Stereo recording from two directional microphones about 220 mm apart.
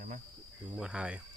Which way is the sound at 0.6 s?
5° right (ahead or behind).